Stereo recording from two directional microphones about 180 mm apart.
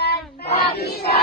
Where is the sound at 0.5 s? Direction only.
35° left (ahead or behind).